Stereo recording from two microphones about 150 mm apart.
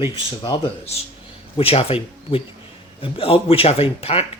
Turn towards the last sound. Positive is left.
turn(degrees=40)  # may be behind; listen again after turning